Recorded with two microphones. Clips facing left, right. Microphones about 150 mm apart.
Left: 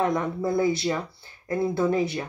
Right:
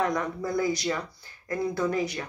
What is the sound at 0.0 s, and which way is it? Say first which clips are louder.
Speech: left 3 dB; 25° left (ahead or behind).